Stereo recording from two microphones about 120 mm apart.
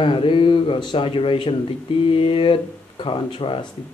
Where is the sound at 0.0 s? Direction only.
45° left (ahead or behind).